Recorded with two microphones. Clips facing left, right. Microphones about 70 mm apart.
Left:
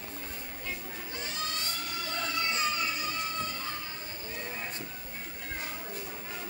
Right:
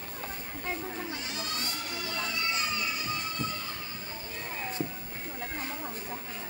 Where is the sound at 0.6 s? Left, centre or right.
Right.